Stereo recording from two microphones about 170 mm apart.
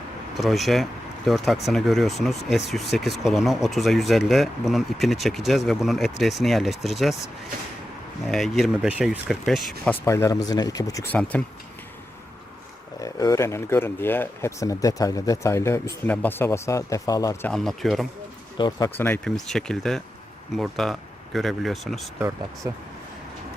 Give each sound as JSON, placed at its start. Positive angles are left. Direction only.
{"t": 0.3, "sound": "speech", "side_deg": 0}
{"t": 8.3, "sound": "speech", "side_deg": 0}
{"t": 10.1, "sound": "speech", "side_deg": 20}
{"t": 11.1, "sound": "speech", "side_deg": 10}
{"t": 13.0, "sound": "speech", "side_deg": 20}
{"t": 17.4, "sound": "speech", "side_deg": 5}
{"t": 18.5, "sound": "speech", "side_deg": 25}
{"t": 18.9, "sound": "speech", "side_deg": 10}
{"t": 22.6, "sound": "speech", "side_deg": -20}